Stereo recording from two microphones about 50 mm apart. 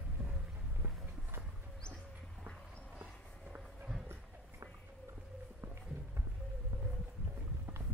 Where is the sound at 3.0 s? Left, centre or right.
Right.